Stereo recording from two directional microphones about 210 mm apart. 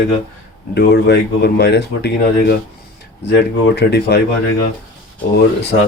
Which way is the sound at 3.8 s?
50° left (ahead or behind).